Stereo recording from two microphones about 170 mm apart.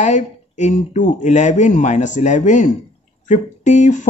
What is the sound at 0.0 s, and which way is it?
Speech, 45° left (ahead or behind).